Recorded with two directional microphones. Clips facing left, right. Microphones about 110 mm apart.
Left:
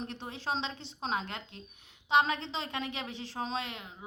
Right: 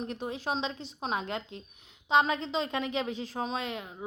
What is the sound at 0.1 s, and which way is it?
A woman's voice, 15° right (ahead or behind).